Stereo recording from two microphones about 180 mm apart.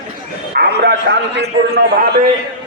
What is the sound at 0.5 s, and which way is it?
A man's voice, 65° right (ahead or behind).